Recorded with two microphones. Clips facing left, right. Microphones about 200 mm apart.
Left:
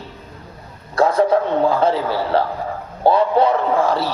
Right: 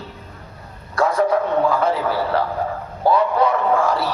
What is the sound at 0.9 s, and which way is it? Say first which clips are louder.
Speech: left 3 dB; 25° left (ahead or behind).